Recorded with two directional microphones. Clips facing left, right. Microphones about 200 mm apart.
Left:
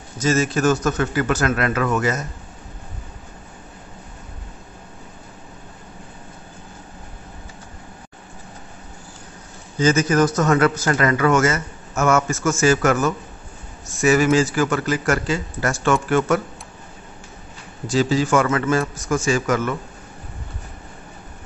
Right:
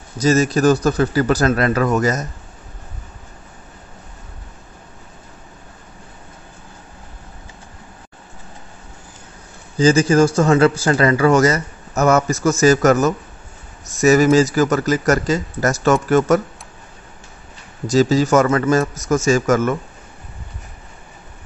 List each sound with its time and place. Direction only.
0.2 s speech: 40° right (ahead or behind)
9.8 s speech: 30° right (ahead or behind)
17.8 s speech: 40° right (ahead or behind)